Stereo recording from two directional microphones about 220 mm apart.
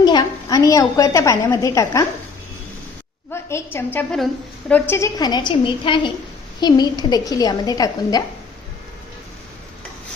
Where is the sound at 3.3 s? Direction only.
10° left (ahead or behind).